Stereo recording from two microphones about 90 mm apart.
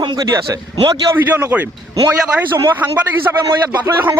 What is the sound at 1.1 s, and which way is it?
Speech, 20° right (ahead or behind).